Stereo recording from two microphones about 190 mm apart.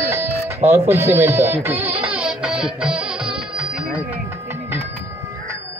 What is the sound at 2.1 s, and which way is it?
Music, 5° right (ahead or behind).